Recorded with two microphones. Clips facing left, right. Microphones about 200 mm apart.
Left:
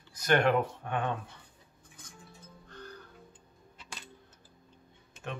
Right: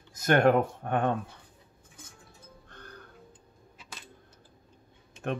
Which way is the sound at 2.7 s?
55° right (ahead or behind).